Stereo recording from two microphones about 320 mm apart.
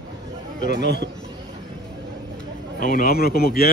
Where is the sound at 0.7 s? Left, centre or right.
Right.